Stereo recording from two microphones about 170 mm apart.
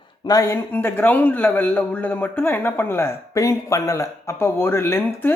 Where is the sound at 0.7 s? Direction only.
10° left (ahead or behind).